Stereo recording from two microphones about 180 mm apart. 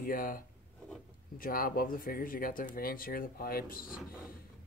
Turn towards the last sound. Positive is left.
turn(degrees=55)  # may be behind; listen again after turning